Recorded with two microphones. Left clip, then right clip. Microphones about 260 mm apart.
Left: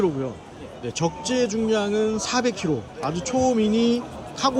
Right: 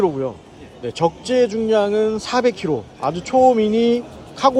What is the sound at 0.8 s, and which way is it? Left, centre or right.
Speech, centre.